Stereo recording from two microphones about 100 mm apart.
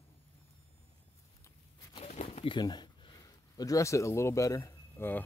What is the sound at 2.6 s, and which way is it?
Speech, 45° left (ahead or behind).